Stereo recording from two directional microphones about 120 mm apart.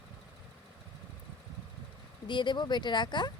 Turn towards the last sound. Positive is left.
turn(degrees=40)  # may be behind; listen again after turning